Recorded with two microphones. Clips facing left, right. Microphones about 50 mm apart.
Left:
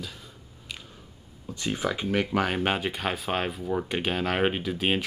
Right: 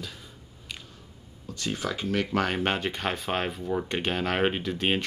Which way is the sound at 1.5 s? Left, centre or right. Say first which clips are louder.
Left 2 dB; centre.